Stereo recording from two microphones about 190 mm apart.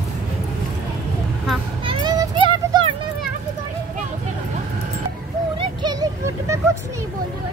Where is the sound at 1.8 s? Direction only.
20° right (ahead or behind).